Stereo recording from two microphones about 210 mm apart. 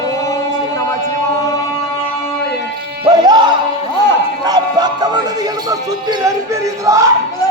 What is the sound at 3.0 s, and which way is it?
Music, 20° right (ahead or behind).